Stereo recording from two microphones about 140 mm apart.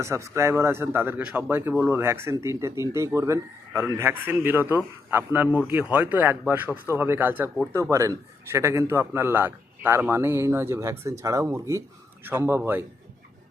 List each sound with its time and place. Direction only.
0.0 s speech: 20° right (ahead or behind)